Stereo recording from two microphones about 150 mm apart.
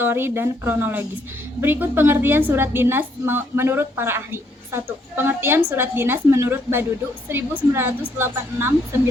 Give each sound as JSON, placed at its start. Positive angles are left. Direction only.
{"t": 0.0, "sound": "a woman's voice", "side_deg": -15}